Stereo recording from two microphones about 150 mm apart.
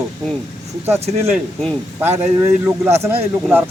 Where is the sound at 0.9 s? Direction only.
45° right (ahead or behind).